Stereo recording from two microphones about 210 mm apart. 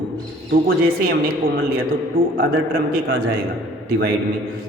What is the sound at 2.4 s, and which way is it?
Speech, 45° right (ahead or behind).